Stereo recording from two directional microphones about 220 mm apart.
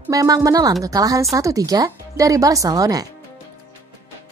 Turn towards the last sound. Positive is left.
turn(degrees=-15)  # may be behind; listen again after turning